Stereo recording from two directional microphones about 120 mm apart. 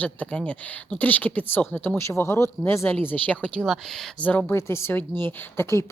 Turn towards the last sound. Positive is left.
turn(degrees=20)  # may be behind; listen again after turning